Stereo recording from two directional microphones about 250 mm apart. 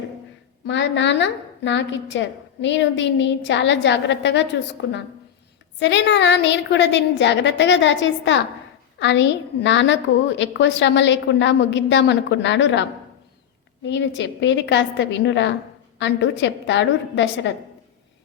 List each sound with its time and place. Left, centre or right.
0.7 s a woman's voice: left
5.8 s a woman's voice: left
13.8 s a woman's voice: left